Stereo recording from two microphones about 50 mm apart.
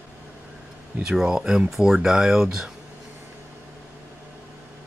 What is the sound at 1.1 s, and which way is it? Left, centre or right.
Speech, centre.